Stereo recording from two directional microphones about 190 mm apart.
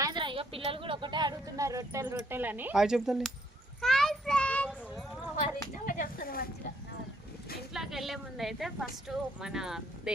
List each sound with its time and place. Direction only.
0.0 s speech: 25° right (ahead or behind); by 3.3 s centre (ahead or behind)
3.8 s children playing: centre (ahead or behind)
5.8 s a sound: 45° left (ahead or behind)
7.7 s a woman's voice: centre (ahead or behind)